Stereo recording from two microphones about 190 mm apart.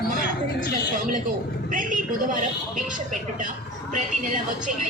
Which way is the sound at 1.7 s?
45° right (ahead or behind).